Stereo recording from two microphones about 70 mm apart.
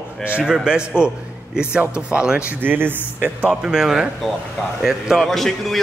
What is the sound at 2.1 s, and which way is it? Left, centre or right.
Speech, centre.